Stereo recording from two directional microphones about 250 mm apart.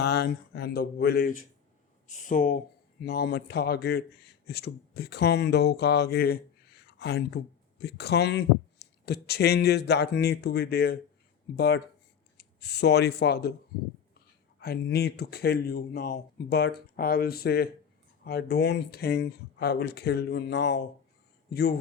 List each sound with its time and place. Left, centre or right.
0.0 s speech: left
14.6 s speech: left